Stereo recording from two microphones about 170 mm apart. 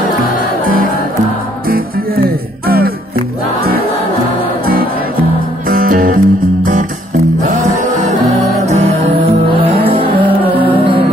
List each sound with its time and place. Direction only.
2.6 s music: 60° right (ahead or behind)
5.7 s music: 55° right (ahead or behind)